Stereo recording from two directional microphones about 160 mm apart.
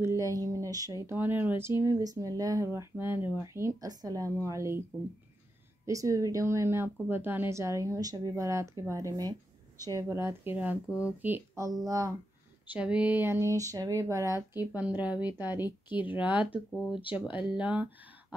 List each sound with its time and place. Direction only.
0.0 s speech: 20° right (ahead or behind)
5.9 s speech: 20° right (ahead or behind)
10.9 s speech: 20° left (ahead or behind)
11.2 s speech: 15° right (ahead or behind)
12.7 s speech: 10° right (ahead or behind)
16.7 s speech: 5° left (ahead or behind)
17.6 s speech: 10° right (ahead or behind)